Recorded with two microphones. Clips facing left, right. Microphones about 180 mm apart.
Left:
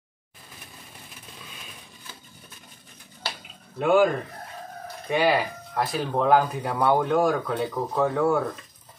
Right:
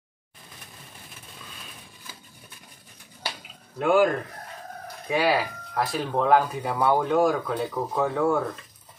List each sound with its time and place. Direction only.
3.7 s speech: centre (ahead or behind)